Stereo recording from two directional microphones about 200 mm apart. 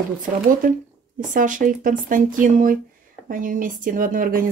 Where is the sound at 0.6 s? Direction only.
40° right (ahead or behind).